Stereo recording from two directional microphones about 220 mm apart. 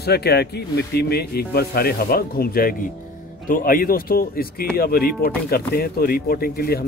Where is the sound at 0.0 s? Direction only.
45° left (ahead or behind).